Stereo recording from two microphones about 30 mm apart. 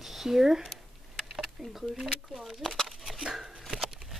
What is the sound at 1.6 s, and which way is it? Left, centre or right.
Speech, centre.